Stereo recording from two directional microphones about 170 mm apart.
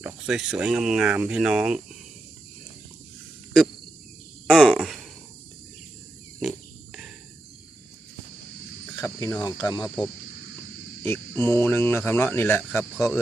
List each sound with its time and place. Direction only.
0.0 s speech: 5° right (ahead or behind)
4.4 s cricket: centre (ahead or behind)
9.0 s cricket: 15° left (ahead or behind)
9.4 s speech: 25° left (ahead or behind)
11.0 s speech: 15° left (ahead or behind)